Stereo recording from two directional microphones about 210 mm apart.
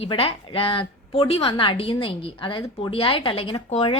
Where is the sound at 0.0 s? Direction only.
25° left (ahead or behind).